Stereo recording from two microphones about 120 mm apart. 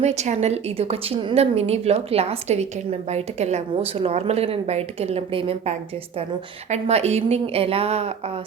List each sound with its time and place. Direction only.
0.0 s a woman's voice: 70° right (ahead or behind); by 5.7 s 50° right (ahead or behind)
6.7 s a woman's voice: 60° right (ahead or behind)